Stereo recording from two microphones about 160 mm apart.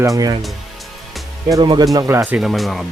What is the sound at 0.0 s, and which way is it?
Speech, 20° right (ahead or behind).